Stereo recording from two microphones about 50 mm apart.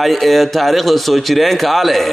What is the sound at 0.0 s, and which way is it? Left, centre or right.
A man's voice, centre.